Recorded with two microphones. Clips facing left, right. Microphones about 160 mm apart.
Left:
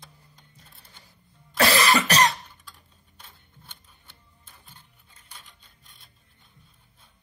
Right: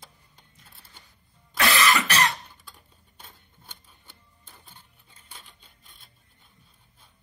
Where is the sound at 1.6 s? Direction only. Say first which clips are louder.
Left 2 dB; 35° left (ahead or behind).